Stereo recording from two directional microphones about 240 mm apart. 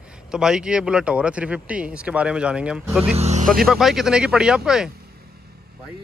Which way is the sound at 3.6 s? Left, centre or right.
Centre.